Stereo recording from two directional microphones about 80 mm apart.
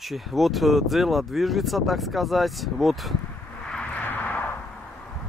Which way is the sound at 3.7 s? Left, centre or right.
Centre.